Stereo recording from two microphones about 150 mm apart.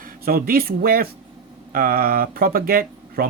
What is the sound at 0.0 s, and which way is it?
Speech, 80° right.